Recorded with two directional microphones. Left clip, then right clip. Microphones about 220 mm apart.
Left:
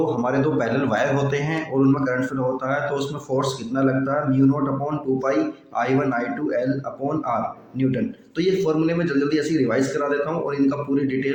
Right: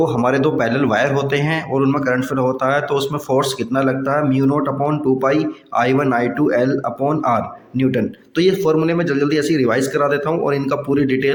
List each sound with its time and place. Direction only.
0.2 s a man's voice: 35° right (ahead or behind)